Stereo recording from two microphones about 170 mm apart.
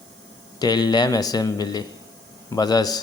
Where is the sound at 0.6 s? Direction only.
25° left (ahead or behind).